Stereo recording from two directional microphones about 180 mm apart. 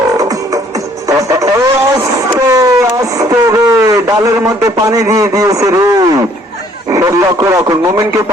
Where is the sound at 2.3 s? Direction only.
20° right (ahead or behind).